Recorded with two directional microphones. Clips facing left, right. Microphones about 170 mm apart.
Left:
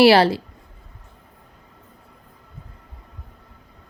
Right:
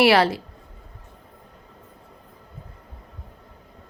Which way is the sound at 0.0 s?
30° left (ahead or behind).